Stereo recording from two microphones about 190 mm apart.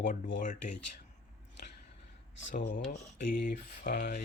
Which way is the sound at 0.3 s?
40° left (ahead or behind).